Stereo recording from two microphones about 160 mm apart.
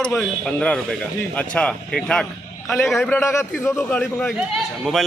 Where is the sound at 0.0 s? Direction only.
5° left (ahead or behind).